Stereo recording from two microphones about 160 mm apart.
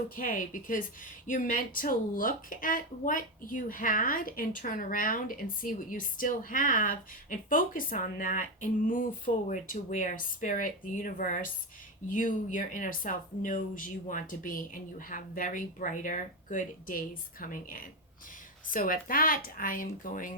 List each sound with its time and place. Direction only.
0.2 s speech: 60° left (ahead or behind)